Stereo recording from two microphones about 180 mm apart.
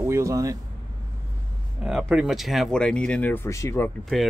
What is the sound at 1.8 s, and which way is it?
Speech, 5° right (ahead or behind).